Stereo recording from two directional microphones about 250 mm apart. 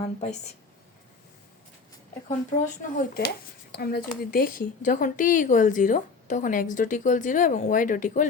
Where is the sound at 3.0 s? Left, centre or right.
Left.